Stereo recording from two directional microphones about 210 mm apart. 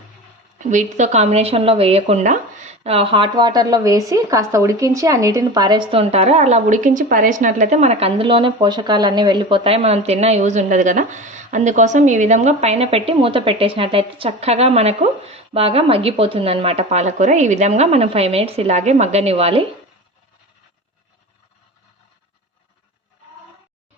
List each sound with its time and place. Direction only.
0.6 s speech: 35° right (ahead or behind)